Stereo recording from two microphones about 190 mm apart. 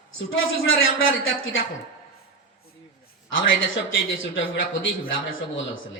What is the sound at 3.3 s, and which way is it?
A man's voice, 90° left.